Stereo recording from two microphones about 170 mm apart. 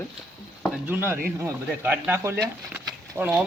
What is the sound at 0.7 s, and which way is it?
Speech, 10° right (ahead or behind).